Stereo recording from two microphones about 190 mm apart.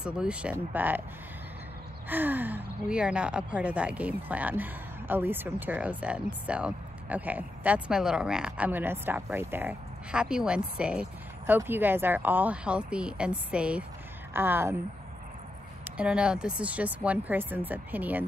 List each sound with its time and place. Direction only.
0.0 s speech: 5° right (ahead or behind)
2.0 s speech: 10° right (ahead or behind)
15.8 s speech: 5° right (ahead or behind)